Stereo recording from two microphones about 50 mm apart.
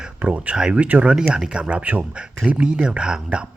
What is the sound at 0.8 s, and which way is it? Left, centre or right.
Speech, right.